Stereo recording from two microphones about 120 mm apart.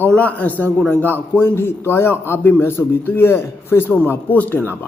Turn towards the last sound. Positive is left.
turn(degrees=15)  # may be behind; listen again after turning